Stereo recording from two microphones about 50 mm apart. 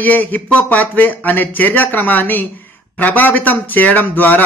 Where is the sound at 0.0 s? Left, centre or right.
Left.